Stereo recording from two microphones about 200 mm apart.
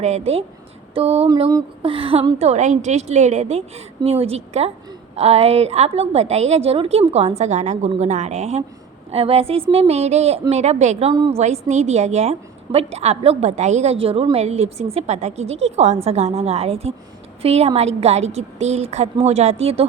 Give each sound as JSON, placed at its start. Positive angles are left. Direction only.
{"t": 0.0, "sound": "a woman's voice", "side_deg": -30}
{"t": 1.3, "sound": "a woman's voice", "side_deg": -20}
{"t": 11.1, "sound": "speech", "side_deg": -20}
{"t": 11.3, "sound": "a woman's voice", "side_deg": -35}